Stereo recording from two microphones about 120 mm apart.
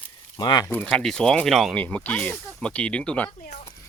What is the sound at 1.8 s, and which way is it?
Speech, 15° left (ahead or behind).